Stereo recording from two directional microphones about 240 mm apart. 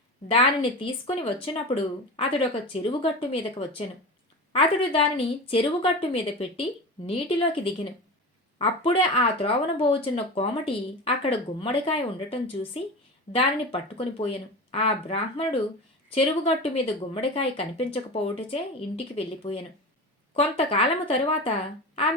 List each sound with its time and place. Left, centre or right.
0.3 s speech: left